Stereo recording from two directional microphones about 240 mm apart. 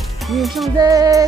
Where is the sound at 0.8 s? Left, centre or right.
Centre.